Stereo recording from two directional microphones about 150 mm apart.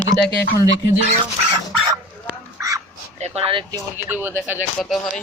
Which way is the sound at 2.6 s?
20° right (ahead or behind).